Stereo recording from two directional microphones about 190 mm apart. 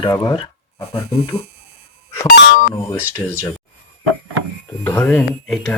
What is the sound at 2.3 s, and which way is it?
Beep, 50° left (ahead or behind).